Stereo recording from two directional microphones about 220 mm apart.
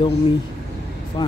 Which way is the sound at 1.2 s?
20° left (ahead or behind).